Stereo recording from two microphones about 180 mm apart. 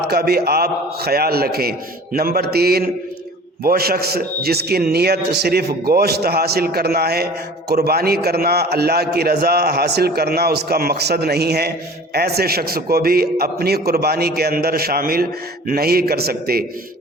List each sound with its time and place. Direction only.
0.1 s a man's voice: 60° right (ahead or behind)